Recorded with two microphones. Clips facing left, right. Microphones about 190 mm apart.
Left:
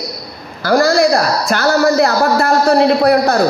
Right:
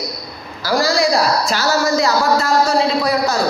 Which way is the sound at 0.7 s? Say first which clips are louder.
Left 5 dB; 55° left (ahead or behind).